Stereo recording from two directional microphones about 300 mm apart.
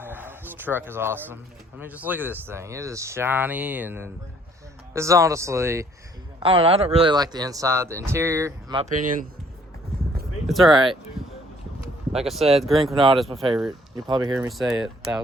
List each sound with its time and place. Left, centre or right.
0.0 s a sound: centre
1.8 s speech: centre
8.8 s speech: right
10.4 s speech: centre
11.2 s a sound: centre
12.1 s speech: centre
12.8 s speech: centre
13.1 s speech: centre
13.9 s speech: centre
14.5 s speech: centre